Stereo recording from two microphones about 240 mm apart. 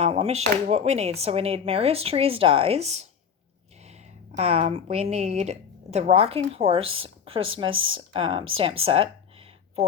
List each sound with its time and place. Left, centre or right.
0.0 s speech: right
4.4 s speech: right
7.7 s speech: right
7.9 s speech: right